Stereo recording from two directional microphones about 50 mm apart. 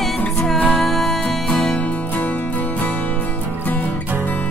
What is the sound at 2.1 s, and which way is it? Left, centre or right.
Music, left.